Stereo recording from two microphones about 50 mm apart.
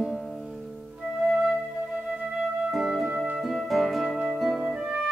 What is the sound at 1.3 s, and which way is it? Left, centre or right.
Flute, centre.